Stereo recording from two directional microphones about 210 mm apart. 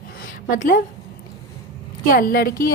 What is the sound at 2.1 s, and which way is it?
Speech, 45° left (ahead or behind).